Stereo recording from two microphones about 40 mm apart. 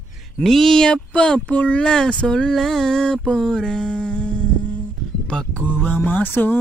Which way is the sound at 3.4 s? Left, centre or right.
Centre.